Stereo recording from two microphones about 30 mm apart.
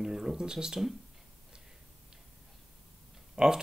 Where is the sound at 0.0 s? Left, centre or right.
Centre.